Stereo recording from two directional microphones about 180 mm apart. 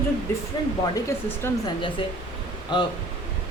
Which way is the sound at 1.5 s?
20° left (ahead or behind).